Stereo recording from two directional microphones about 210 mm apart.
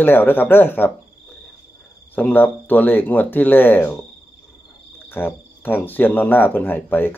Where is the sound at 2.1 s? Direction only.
10° left (ahead or behind).